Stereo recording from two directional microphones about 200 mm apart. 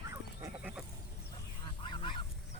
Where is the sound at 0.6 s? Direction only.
5° right (ahead or behind).